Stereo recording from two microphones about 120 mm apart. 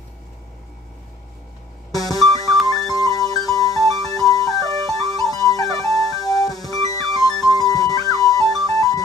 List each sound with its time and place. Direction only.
1.9 s music: 30° left (ahead or behind)